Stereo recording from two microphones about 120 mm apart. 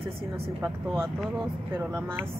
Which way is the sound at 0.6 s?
20° right (ahead or behind).